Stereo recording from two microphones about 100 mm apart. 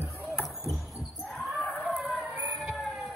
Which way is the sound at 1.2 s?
Centre (ahead or behind).